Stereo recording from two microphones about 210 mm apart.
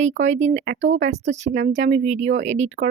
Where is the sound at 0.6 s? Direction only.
60° right (ahead or behind).